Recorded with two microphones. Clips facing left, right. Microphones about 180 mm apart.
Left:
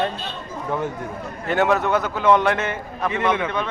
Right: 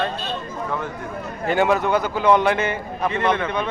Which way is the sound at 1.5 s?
Centre (ahead or behind).